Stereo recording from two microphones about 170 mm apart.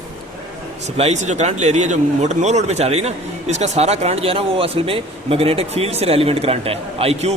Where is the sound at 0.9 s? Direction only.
40° right (ahead or behind).